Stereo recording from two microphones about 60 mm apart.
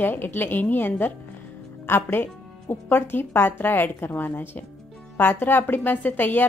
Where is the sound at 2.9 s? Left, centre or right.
Left.